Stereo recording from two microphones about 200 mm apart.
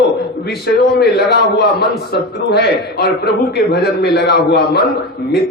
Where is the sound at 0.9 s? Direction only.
55° left (ahead or behind).